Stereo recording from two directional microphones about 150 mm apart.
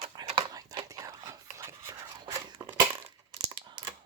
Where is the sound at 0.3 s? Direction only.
30° right (ahead or behind).